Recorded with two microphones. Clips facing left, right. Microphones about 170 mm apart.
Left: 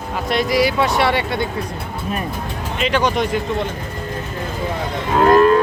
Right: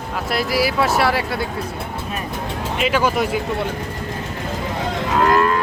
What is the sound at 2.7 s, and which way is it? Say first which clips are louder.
Speech: even; 5° right (ahead or behind).